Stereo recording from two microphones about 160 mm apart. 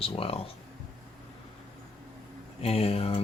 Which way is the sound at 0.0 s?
35° left (ahead or behind).